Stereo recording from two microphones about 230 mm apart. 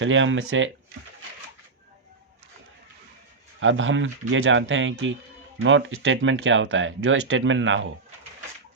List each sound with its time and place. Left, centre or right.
0.0 s speech: right
3.6 s speech: right